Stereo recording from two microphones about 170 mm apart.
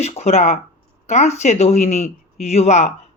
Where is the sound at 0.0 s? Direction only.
40° left (ahead or behind).